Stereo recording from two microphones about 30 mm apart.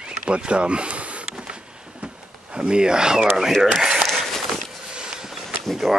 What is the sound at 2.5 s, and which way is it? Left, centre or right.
Speech, right.